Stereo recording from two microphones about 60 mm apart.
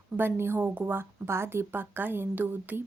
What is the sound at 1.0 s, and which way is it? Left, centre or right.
A woman's voice, right.